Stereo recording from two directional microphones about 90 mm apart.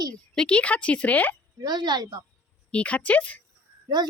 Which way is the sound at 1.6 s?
55° right (ahead or behind).